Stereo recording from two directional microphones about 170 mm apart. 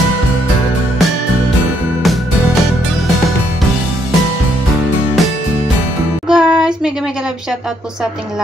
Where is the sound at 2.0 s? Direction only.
Centre (ahead or behind).